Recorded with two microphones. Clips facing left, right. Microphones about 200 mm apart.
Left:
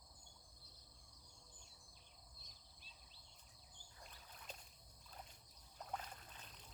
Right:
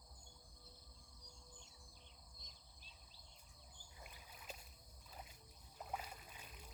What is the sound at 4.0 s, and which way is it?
Rowboat, 10° right (ahead or behind).